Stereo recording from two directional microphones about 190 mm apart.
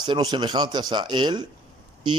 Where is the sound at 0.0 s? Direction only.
25° right (ahead or behind).